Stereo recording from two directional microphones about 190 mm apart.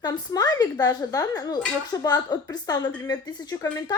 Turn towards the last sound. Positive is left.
turn(degrees=20)  # may be behind; listen again after turning